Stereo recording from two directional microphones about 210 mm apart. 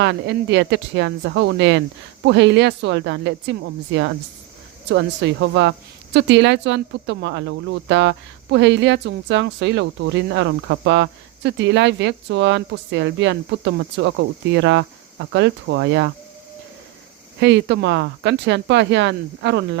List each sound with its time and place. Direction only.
0.0 s speech: 55° right (ahead or behind)
4.9 s speech: 60° right (ahead or behind)
17.4 s speech: 55° right (ahead or behind)